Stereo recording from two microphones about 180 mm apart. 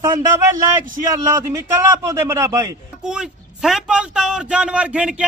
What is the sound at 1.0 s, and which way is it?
A man's voice, 20° right (ahead or behind).